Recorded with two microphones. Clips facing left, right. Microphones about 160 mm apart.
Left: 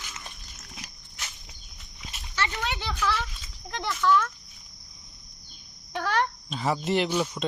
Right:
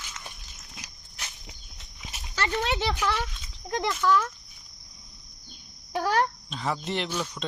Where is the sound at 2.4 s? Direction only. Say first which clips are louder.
Right 3 dB; 45° right (ahead or behind).